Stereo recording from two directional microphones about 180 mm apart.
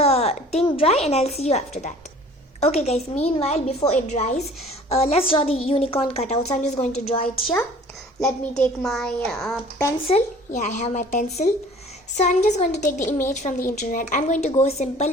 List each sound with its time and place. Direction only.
0.0 s a woman's voice: 35° left (ahead or behind)
8.2 s a child's voice: 5° left (ahead or behind)
10.1 s a woman's voice: 40° left (ahead or behind)
13.1 s a woman's voice: 10° left (ahead or behind)
13.3 s a woman's voice: 40° left (ahead or behind)